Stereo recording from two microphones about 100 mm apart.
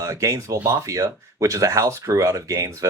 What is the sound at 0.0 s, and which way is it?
Speech, 35° right (ahead or behind).